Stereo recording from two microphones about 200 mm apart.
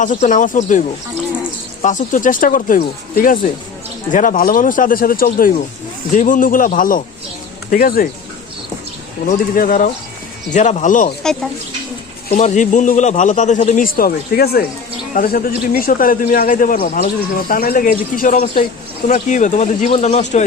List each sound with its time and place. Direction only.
0.0 s a man's voice: 40° left (ahead or behind)
1.8 s a man's voice: 40° left (ahead or behind)
9.2 s a man's voice: 40° left (ahead or behind)
12.3 s a man's voice: 35° left (ahead or behind)